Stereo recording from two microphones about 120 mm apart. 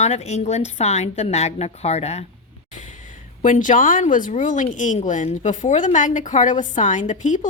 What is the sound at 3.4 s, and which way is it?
A woman's voice, 90° left.